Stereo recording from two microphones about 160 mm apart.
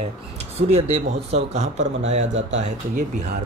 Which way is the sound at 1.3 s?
45° right (ahead or behind).